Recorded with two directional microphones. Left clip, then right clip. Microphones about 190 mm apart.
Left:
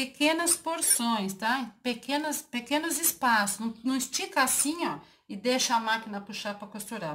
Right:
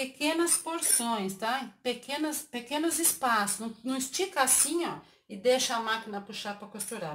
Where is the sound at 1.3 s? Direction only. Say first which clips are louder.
Left 2 dB; 10° right (ahead or behind).